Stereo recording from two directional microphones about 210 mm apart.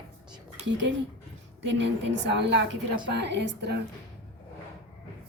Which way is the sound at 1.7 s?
55° right (ahead or behind).